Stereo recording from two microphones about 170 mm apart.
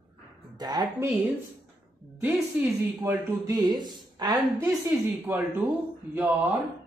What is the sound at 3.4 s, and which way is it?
Speech, 25° right (ahead or behind).